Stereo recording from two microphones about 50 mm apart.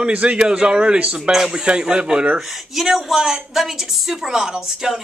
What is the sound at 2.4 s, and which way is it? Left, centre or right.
A woman's voice, centre.